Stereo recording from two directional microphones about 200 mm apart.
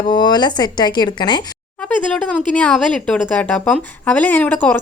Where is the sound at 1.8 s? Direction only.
5° left (ahead or behind).